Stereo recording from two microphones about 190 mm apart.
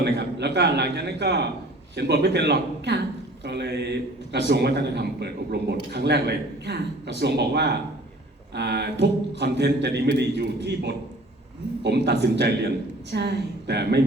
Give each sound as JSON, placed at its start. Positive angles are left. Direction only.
{"t": 0.0, "sound": "a man's voice", "side_deg": -60}